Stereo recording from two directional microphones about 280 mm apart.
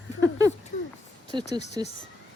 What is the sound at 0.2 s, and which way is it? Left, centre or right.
Speech, centre.